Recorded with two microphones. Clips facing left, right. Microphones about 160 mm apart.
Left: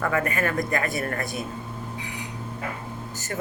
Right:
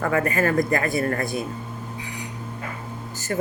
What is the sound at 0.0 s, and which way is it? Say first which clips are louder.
Speech: right 3 dB; 35° right (ahead or behind).